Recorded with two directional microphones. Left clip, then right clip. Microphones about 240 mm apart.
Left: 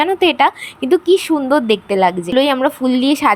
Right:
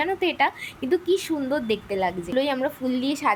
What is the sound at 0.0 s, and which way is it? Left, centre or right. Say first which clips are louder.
Speech: left 10 dB; left.